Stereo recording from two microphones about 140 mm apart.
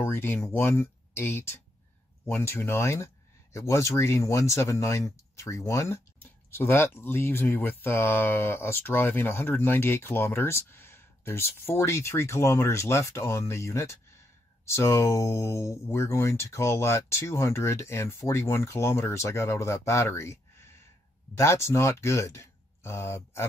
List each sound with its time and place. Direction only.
0.0 s speech: 15° left (ahead or behind)